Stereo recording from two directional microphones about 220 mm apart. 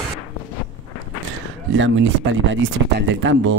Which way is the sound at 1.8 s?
60° right (ahead or behind).